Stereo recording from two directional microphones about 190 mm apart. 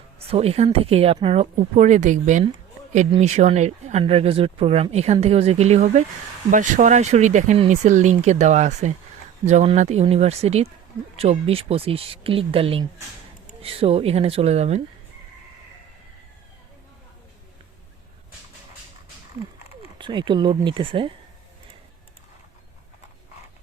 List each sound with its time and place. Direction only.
0.2 s speech: 30° right (ahead or behind)
20.0 s speech: 25° right (ahead or behind)